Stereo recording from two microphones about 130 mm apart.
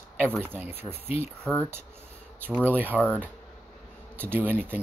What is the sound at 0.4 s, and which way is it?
Speech, 15° right (ahead or behind).